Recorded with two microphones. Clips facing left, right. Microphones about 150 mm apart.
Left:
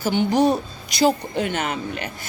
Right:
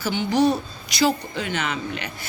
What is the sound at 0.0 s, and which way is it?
Speech, 50° left (ahead or behind).